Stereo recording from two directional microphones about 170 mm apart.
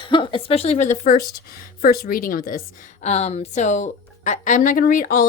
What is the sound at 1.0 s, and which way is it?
A woman's voice, 60° left (ahead or behind).